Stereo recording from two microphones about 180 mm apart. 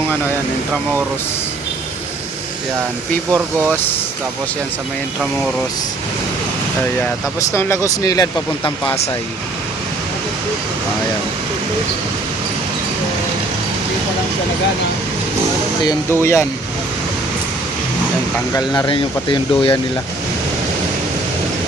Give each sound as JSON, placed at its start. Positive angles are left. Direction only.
{"t": 3.3, "sound": "speech", "side_deg": -10}
{"t": 7.5, "sound": "speech", "side_deg": 15}
{"t": 15.8, "sound": "speech", "side_deg": 20}
{"t": 18.5, "sound": "speech", "side_deg": 20}